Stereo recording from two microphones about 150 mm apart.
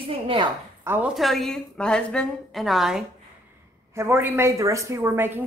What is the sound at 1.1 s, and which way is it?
A woman's voice, centre (ahead or behind).